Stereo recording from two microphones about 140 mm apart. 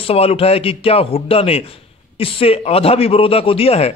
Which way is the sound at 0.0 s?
45° left (ahead or behind).